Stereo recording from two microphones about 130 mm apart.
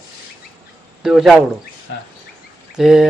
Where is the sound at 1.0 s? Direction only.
5° right (ahead or behind).